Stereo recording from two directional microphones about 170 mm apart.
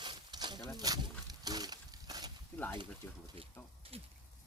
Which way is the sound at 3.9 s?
35° right (ahead or behind).